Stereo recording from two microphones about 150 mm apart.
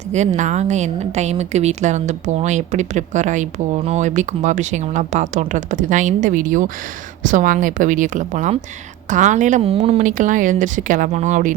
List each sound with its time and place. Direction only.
0.1 s a woman's voice: 50° right (ahead or behind)
10.0 s speech: 60° right (ahead or behind)